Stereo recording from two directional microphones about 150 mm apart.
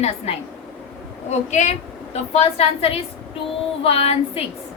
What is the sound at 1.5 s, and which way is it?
A woman's voice, 50° left (ahead or behind).